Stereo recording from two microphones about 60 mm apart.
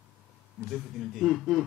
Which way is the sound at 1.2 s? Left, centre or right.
Centre.